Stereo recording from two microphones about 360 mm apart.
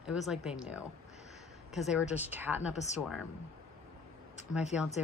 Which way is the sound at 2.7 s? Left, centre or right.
Centre.